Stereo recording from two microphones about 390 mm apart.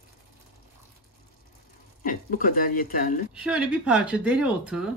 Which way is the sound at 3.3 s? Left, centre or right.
Centre.